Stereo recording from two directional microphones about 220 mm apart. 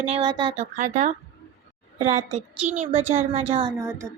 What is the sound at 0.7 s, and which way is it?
A woman's voice, 35° right (ahead or behind).